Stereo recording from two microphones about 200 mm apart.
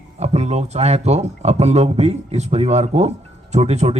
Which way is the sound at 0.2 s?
30° right (ahead or behind).